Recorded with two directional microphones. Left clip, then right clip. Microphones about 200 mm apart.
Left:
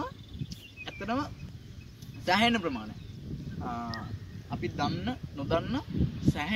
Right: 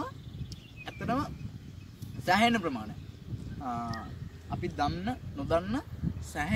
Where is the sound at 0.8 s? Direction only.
5° right (ahead or behind).